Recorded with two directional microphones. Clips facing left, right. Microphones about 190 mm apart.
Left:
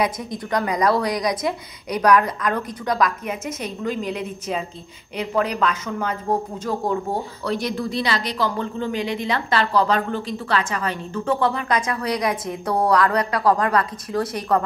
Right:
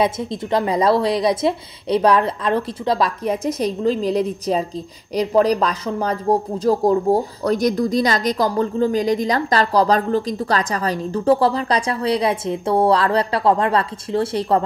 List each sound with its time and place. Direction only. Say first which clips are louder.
0.0 s a woman's voice: right 4 dB; 25° right (ahead or behind)